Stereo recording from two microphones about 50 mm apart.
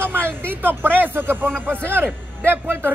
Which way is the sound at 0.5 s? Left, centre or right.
Right.